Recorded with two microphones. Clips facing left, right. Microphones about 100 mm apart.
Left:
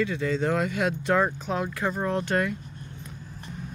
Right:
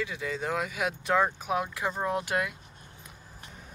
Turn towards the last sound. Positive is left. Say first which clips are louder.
# left 9 dB
turn(degrees=0)  # may be behind; listen again after turning